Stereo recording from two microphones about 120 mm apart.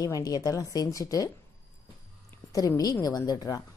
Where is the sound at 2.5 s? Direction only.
30° left (ahead or behind).